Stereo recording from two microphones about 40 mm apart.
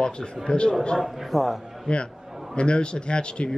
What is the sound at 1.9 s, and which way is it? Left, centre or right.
Speech, left.